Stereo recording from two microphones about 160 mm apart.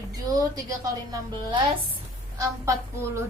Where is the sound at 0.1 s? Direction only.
20° right (ahead or behind).